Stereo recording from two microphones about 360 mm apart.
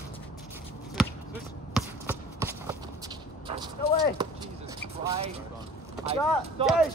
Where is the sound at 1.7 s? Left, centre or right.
Centre.